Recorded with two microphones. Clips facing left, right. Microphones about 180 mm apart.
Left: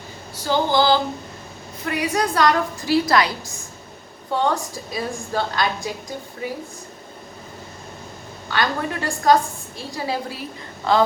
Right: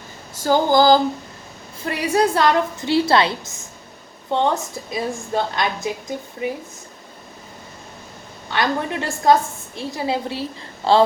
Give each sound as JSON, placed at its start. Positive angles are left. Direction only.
{"t": 0.3, "sound": "a sound", "side_deg": -45}
{"t": 1.8, "sound": "a woman's voice", "side_deg": -30}
{"t": 8.4, "sound": "a woman's voice", "side_deg": -25}